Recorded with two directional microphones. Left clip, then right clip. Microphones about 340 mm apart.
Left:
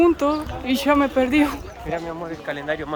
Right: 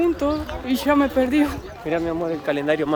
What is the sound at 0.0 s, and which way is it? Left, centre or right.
Speech, centre.